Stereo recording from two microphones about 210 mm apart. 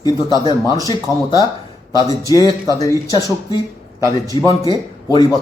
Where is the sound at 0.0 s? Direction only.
20° left (ahead or behind).